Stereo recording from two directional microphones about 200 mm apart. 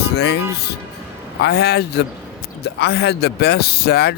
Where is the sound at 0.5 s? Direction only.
55° left (ahead or behind).